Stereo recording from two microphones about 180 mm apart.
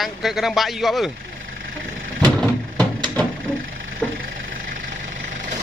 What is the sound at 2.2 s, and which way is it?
Vehicle, 5° left (ahead or behind).